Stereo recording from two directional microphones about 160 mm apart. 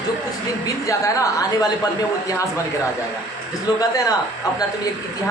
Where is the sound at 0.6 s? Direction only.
20° left (ahead or behind).